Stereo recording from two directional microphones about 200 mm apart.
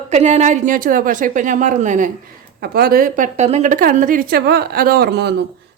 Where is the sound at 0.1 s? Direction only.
35° right (ahead or behind).